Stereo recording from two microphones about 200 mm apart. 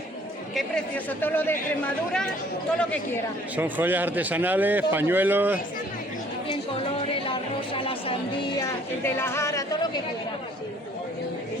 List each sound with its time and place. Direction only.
0.5 s speech: 10° left (ahead or behind)
3.5 s a man's voice: 10° right (ahead or behind)
7.1 s a sound: 25° left (ahead or behind)
8.5 s a woman's voice: 15° left (ahead or behind)